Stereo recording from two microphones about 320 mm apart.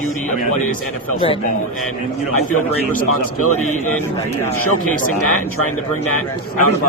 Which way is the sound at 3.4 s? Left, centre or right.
Left.